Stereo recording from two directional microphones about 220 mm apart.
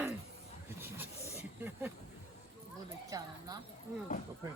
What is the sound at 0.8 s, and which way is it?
Vehicle, 10° right (ahead or behind).